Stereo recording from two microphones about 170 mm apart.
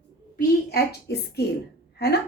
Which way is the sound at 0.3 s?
65° left (ahead or behind).